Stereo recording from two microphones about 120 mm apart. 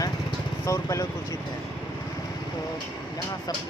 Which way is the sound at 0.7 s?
25° left (ahead or behind).